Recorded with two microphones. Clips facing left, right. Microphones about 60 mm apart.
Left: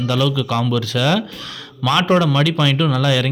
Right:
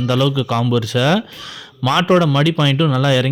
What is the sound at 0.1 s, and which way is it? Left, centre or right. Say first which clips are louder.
Speech: right 2 dB; right.